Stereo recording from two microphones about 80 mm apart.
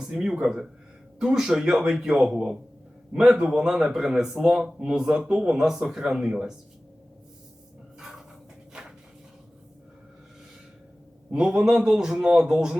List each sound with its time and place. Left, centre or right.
0.0 s a man's voice: centre
7.9 s a sound: centre
11.3 s speech: centre